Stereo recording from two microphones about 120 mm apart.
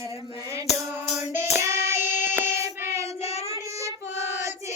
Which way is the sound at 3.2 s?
60° left (ahead or behind).